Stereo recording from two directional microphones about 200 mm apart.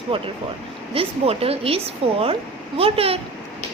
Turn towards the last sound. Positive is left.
turn(degrees=-30)  # may be behind; listen again after turning